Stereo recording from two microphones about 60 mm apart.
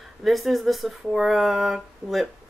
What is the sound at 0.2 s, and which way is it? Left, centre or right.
Speech, centre.